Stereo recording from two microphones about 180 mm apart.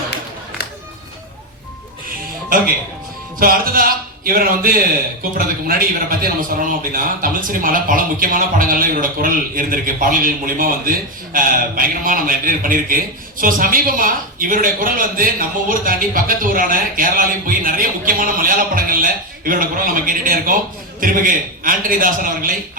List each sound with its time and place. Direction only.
3.4 s a man's voice: 55° right (ahead or behind)